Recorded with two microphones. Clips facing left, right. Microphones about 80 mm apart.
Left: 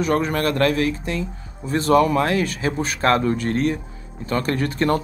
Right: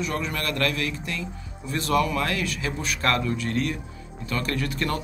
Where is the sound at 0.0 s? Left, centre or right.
Left.